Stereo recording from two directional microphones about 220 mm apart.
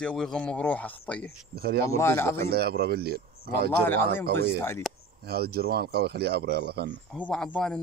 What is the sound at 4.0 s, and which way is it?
Speech, 45° right (ahead or behind).